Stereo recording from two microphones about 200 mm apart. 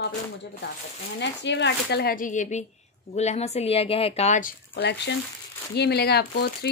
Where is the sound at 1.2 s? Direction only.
60° left (ahead or behind).